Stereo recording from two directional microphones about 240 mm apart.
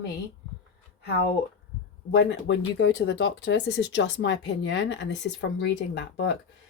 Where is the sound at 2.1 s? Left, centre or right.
Left.